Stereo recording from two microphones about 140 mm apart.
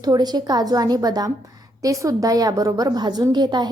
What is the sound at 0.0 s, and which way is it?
A woman's voice, 30° right (ahead or behind).